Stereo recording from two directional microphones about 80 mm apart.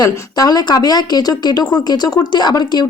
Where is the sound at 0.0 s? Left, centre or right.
Left.